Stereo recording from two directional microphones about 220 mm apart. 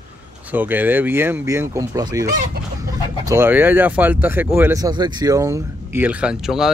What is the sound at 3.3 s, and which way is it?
Speech, 10° right (ahead or behind).